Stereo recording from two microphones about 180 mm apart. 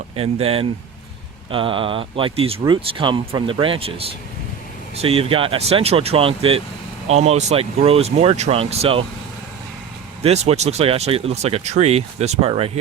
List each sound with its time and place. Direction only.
0.2 s speech: 30° right (ahead or behind)
10.2 s speech: 35° right (ahead or behind)